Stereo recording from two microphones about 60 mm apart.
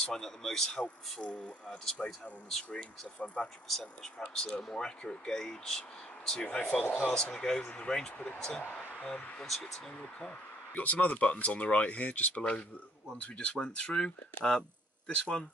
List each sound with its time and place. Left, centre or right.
0.0 s speech: centre
1.2 s speech: centre
3.6 s speech: centre
9.5 s speech: centre
10.7 s speech: left